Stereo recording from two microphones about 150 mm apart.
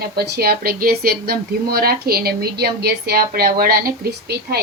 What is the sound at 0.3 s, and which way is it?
A woman's voice, 90° right.